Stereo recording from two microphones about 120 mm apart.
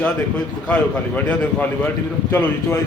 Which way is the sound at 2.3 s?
20° left (ahead or behind).